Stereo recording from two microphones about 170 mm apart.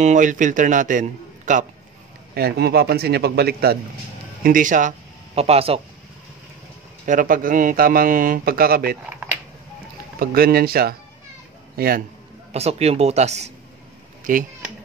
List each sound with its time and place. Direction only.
0.0 s a man's voice: 45° right (ahead or behind)
2.3 s a man's voice: 70° right (ahead or behind)
4.4 s a man's voice: 50° right (ahead or behind); by 5.8 s 35° right (ahead or behind)
7.1 s speech: 55° right (ahead or behind)
10.1 s speech: 65° right (ahead or behind)
12.5 s speech: 40° right (ahead or behind)